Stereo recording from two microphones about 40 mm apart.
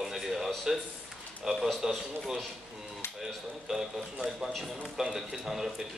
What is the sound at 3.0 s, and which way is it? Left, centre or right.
Dishes, left.